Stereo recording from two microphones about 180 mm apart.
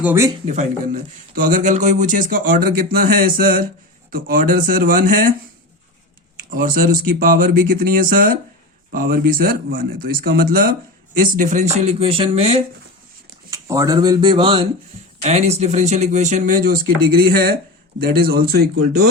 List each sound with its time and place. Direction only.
0.0 s speech: 10° right (ahead or behind)
0.4 s speech: 45° right (ahead or behind)
6.5 s speech: 50° right (ahead or behind); by 12.6 s 35° right (ahead or behind)
13.5 s speech: 20° right (ahead or behind)
15.2 s speech: 35° right (ahead or behind)
16.4 s speech: 55° right (ahead or behind)